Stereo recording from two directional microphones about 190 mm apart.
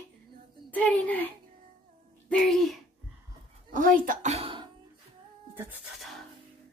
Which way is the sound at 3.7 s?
45° right (ahead or behind).